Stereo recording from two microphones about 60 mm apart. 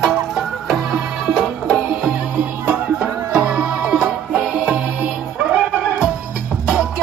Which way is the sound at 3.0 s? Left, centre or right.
Centre.